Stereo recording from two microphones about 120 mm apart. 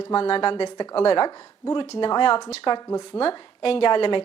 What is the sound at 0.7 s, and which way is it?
A woman's voice, 40° left (ahead or behind).